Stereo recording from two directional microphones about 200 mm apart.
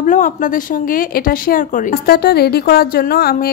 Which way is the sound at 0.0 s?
40° left (ahead or behind).